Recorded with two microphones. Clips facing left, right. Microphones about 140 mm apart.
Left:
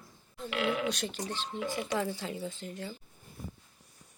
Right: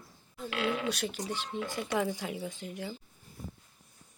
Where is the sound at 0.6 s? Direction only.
80° left.